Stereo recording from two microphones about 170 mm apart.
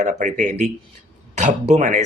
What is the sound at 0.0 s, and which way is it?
Speech, 45° right (ahead or behind).